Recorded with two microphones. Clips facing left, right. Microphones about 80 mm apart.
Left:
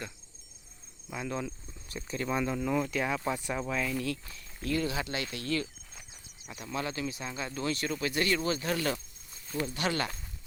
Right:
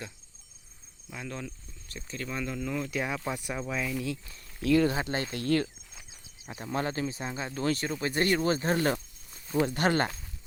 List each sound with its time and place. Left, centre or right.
1.1 s speech: centre
2.9 s speech: centre
4.6 s speech: right
4.9 s speech: right
6.7 s speech: right